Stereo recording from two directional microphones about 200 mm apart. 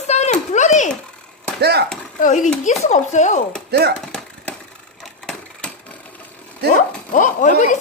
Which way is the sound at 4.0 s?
5° left (ahead or behind).